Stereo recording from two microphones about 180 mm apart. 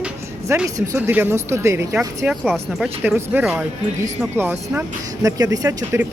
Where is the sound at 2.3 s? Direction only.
Centre (ahead or behind).